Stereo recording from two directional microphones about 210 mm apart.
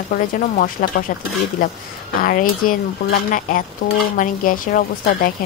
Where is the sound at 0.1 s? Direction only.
40° left (ahead or behind).